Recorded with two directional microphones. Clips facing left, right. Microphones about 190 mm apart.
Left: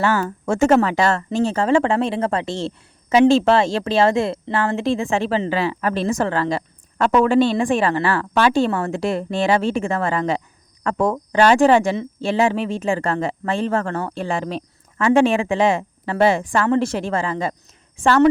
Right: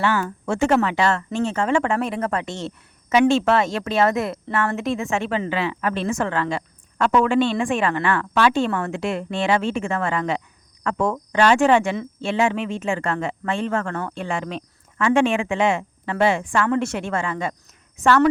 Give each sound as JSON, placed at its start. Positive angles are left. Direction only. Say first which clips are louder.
{"t": 0.0, "sound": "a woman's voice", "louder": "left 2 dB", "side_deg": 40}